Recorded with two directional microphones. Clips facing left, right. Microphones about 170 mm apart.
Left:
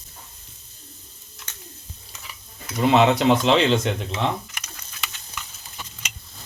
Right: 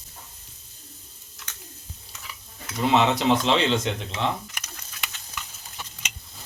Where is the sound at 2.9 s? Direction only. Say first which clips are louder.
Left 3 dB; 60° left (ahead or behind).